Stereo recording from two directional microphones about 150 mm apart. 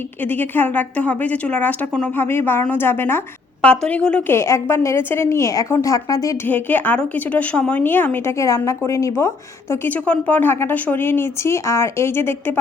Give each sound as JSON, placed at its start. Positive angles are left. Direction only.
{"t": 0.3, "sound": "a woman's voice", "side_deg": 15}
{"t": 4.4, "sound": "a woman's voice", "side_deg": 20}
{"t": 6.5, "sound": "a woman's voice", "side_deg": 10}